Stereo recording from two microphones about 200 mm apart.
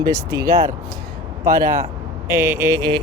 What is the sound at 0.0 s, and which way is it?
Speech, 15° right (ahead or behind).